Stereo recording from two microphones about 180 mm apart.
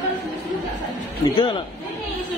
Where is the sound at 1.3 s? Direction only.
25° left (ahead or behind).